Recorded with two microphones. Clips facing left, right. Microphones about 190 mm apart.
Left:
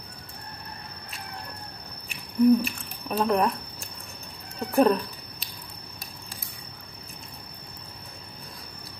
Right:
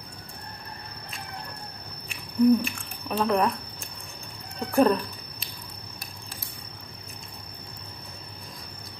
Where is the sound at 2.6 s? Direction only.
5° left (ahead or behind).